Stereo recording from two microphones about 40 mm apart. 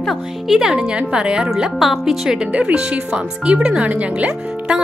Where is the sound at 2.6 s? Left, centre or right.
Right.